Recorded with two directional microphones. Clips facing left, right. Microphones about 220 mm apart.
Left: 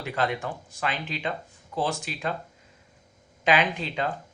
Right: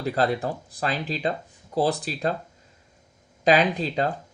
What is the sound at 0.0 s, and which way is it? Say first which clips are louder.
Speech: right 5 dB; 35° right (ahead or behind).